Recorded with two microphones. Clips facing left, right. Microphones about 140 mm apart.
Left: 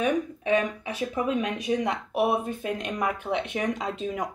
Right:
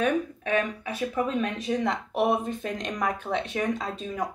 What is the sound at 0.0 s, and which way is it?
Speech, 15° left (ahead or behind).